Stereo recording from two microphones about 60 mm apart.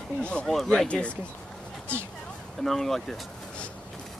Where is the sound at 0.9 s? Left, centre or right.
Left.